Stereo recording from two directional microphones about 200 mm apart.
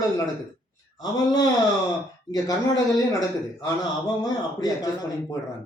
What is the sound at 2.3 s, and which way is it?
A man's voice, 20° left (ahead or behind).